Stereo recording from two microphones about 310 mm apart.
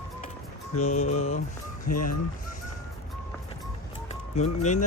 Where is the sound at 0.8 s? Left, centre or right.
Left.